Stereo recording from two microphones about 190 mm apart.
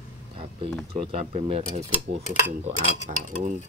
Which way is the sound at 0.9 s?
30° right (ahead or behind).